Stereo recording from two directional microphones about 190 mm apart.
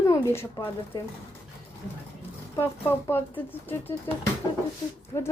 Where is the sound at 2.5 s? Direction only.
15° left (ahead or behind).